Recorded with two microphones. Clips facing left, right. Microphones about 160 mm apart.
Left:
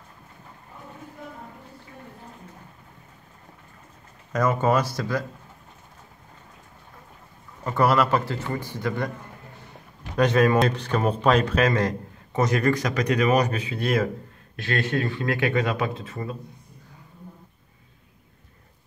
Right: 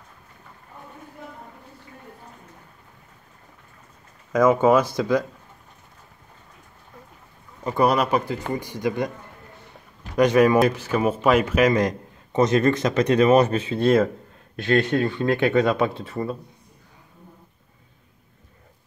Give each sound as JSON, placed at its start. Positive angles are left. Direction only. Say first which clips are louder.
{"t": 4.3, "sound": "speech", "louder": "right 5 dB", "side_deg": -10}
{"t": 7.6, "sound": "speech", "louder": "right 1 dB", "side_deg": -15}
{"t": 10.1, "sound": "a man's voice", "louder": "right 3 dB", "side_deg": -15}
{"t": 16.1, "sound": "a man's voice", "louder": "right 5 dB", "side_deg": -30}